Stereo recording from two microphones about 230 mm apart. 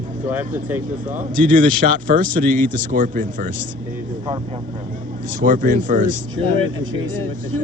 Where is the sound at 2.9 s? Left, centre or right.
Right.